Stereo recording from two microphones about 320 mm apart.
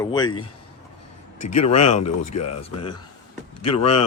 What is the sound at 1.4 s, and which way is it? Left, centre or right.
Speech, left.